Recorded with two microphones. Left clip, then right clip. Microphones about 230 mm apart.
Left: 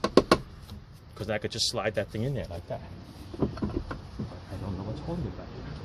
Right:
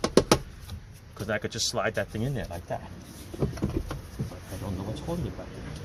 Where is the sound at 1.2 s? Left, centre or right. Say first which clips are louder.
Even; left.